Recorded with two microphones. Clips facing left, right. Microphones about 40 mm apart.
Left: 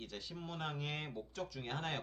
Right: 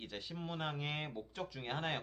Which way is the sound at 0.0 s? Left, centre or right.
Right.